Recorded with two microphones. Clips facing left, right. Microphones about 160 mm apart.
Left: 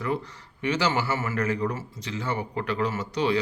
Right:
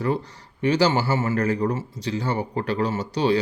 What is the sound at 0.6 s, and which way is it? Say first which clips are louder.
A man's voice: right 5 dB; 35° right (ahead or behind).